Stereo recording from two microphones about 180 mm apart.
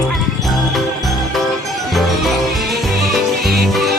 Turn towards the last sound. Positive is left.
turn(degrees=0)  # may be behind; listen again after turning